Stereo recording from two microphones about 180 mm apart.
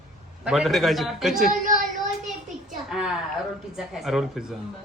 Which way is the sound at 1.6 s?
45° right (ahead or behind).